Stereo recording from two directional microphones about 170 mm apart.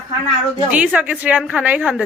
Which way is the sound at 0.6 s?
5° right (ahead or behind).